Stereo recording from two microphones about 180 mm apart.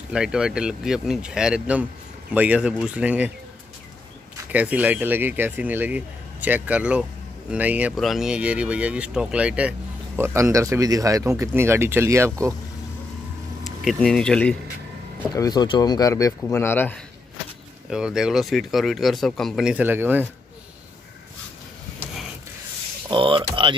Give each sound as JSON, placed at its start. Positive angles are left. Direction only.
{"t": 0.1, "sound": "speech", "side_deg": -5}
{"t": 4.5, "sound": "speech", "side_deg": -10}
{"t": 13.8, "sound": "speech", "side_deg": 5}
{"t": 15.3, "sound": "speech", "side_deg": 20}
{"t": 17.8, "sound": "speech", "side_deg": -5}
{"t": 23.0, "sound": "speech", "side_deg": -30}